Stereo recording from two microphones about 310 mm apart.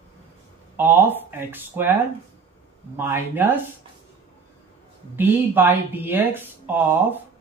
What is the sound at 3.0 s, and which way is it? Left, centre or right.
Speech, centre.